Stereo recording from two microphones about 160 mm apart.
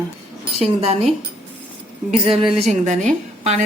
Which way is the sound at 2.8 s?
50° right (ahead or behind).